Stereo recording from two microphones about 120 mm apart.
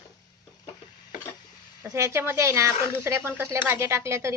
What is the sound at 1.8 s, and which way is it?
Speech, 20° right (ahead or behind).